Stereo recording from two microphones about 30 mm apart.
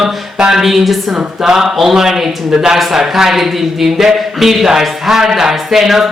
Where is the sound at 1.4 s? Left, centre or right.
Centre.